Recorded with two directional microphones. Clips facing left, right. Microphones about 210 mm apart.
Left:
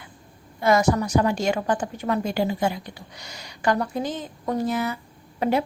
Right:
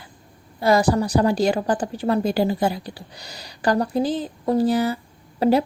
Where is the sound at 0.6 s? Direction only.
35° right (ahead or behind).